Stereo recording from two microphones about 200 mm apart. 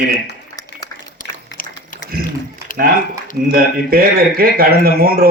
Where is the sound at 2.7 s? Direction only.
45° left (ahead or behind).